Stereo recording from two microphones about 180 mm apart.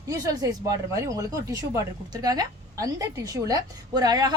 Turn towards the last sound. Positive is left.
turn(degrees=-20)  # may be behind; listen again after turning